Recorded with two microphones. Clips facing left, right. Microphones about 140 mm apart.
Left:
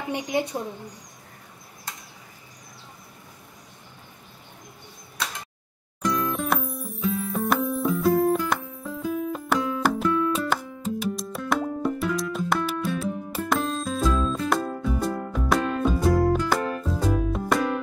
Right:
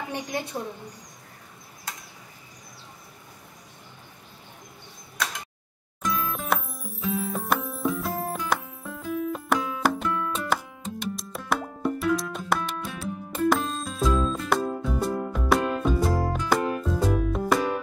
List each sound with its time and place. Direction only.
0.1 s a woman's voice: 15° left (ahead or behind)
6.0 s music: centre (ahead or behind)